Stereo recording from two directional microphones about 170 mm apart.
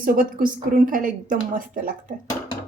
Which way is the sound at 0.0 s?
55° right (ahead or behind).